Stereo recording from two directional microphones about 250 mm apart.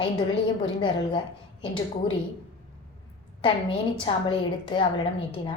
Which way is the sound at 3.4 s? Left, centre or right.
Left.